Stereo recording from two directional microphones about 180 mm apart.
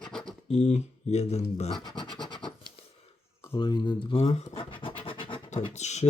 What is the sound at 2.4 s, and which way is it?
Scratch, 25° left (ahead or behind).